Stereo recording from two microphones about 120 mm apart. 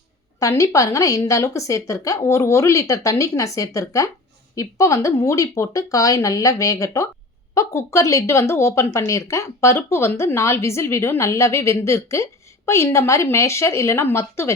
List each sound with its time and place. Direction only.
0.3 s speech: 25° left (ahead or behind)